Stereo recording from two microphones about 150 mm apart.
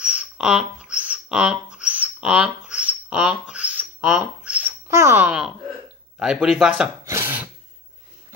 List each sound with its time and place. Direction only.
0.0 s a sound: 10° right (ahead or behind)
6.1 s speech: 5° right (ahead or behind)
7.1 s throat clearing: 15° right (ahead or behind)